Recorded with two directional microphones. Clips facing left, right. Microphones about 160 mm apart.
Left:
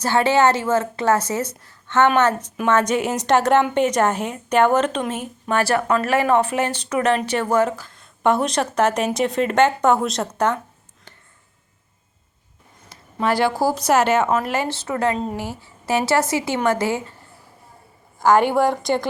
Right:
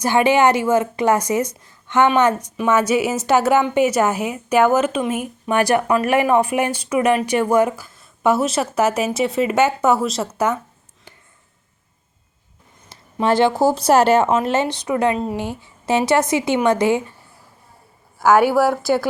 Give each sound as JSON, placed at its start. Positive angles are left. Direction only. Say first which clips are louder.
{"t": 0.0, "sound": "a woman's voice", "louder": "right 2 dB", "side_deg": -15}
{"t": 12.9, "sound": "speech", "louder": "right 3 dB", "side_deg": -25}
{"t": 18.2, "sound": "a woman's voice", "louder": "right 2 dB", "side_deg": -10}